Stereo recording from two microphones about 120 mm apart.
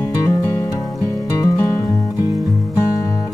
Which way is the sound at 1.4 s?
30° left (ahead or behind).